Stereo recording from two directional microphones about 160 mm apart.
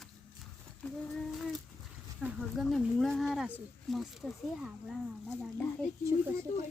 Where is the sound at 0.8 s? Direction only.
Centre (ahead or behind).